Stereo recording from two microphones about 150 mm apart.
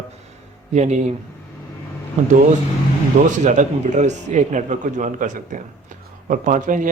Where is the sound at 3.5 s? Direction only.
55° right (ahead or behind).